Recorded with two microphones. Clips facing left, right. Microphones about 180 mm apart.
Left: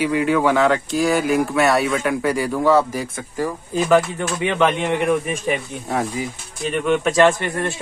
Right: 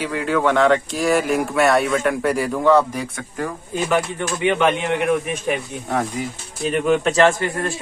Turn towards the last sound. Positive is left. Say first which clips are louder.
# left 1 dB
turn(degrees=20)  # may be behind; listen again after turning